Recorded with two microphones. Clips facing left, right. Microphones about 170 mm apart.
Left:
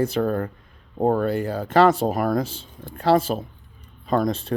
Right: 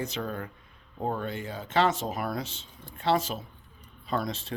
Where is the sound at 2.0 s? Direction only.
50° left (ahead or behind).